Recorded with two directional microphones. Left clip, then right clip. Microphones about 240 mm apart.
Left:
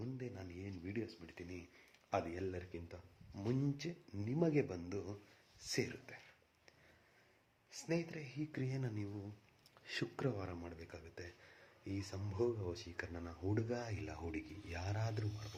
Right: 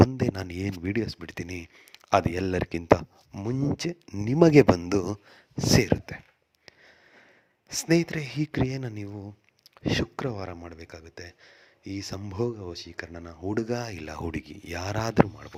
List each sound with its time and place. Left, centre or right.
0.2 s speech: right
3.3 s speech: right
7.8 s speech: right